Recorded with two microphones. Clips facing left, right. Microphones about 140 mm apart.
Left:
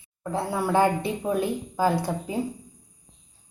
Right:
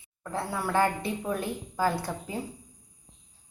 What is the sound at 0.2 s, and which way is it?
A woman's voice, 15° left (ahead or behind).